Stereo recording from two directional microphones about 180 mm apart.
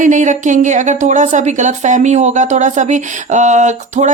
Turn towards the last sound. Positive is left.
turn(degrees=-40)  # may be behind; listen again after turning